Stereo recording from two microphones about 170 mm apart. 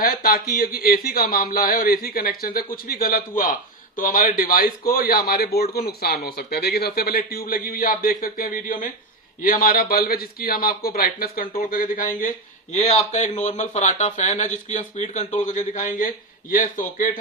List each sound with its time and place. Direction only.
0.0 s speech: 60° left (ahead or behind)
12.7 s speech: 40° left (ahead or behind)